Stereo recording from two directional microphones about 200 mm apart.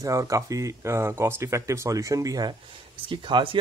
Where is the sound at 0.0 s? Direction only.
15° right (ahead or behind).